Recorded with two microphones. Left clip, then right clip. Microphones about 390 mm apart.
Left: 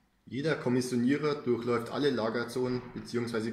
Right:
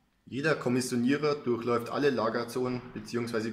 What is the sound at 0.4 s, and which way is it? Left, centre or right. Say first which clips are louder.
A man's voice: right 2 dB; right.